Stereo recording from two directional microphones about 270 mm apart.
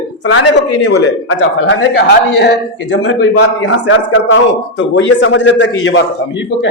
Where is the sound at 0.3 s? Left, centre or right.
Left.